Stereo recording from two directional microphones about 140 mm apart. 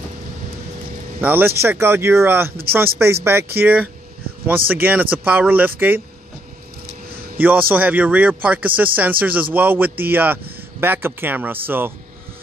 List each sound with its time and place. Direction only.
1.2 s a man's voice: 15° right (ahead or behind)
7.3 s a man's voice: 15° right (ahead or behind)